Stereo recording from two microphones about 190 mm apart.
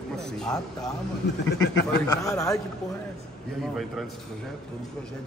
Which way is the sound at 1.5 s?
70° left (ahead or behind).